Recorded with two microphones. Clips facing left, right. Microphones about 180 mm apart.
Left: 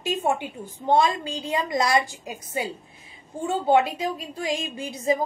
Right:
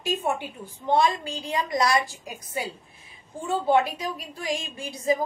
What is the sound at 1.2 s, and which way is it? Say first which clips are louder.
A woman's voice: left 2 dB; 20° left (ahead or behind).